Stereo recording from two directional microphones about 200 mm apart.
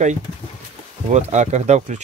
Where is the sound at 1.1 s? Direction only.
35° right (ahead or behind).